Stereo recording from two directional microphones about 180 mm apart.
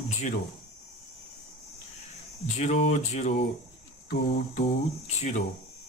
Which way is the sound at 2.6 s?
40° left (ahead or behind).